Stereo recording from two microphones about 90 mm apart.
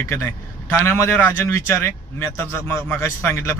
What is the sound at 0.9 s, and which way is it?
A man's voice, 25° left (ahead or behind).